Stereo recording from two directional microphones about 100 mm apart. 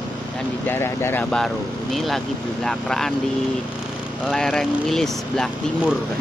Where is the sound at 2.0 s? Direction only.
Centre (ahead or behind).